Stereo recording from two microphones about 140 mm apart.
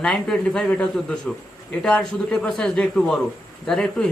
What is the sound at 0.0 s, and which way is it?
A man's voice, 5° left (ahead or behind).